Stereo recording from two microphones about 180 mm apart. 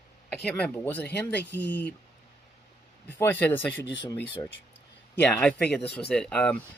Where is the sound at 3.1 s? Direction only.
10° left (ahead or behind).